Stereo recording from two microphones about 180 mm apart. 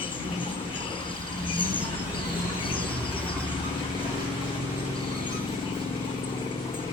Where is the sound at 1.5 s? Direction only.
30° left (ahead or behind).